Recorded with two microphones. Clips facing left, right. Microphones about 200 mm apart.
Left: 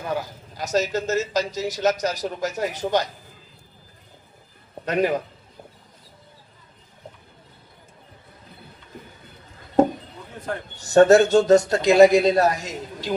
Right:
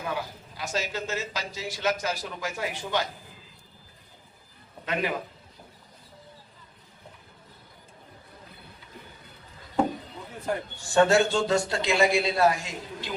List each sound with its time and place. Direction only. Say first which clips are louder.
0.1 s a man's voice: left 5 dB; 45° left (ahead or behind)
4.9 s a man's voice: left 7 dB; 40° left (ahead or behind)
10.8 s a man's voice: left 8 dB; 40° left (ahead or behind)